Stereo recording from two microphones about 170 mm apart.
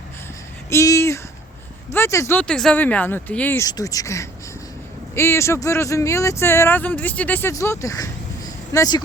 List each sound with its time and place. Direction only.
0.7 s a sound: 15° left (ahead or behind)
1.9 s speech: 15° left (ahead or behind)
2.4 s speech: 5° left (ahead or behind)